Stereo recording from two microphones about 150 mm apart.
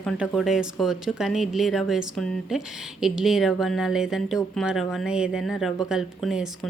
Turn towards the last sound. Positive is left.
turn(degrees=-5)  # may be behind; listen again after turning